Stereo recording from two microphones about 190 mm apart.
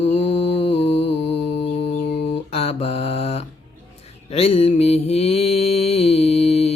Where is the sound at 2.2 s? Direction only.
35° left (ahead or behind).